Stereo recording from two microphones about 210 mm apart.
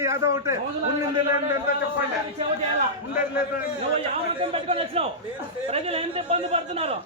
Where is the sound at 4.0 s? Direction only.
25° right (ahead or behind).